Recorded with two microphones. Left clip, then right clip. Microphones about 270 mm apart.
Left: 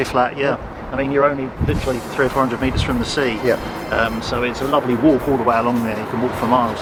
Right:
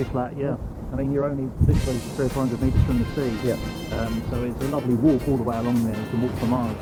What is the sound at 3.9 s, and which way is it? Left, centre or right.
Speech, centre.